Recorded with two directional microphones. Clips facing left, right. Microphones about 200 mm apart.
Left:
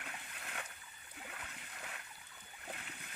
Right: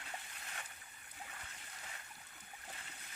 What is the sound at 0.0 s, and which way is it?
Splash, 60° left (ahead or behind).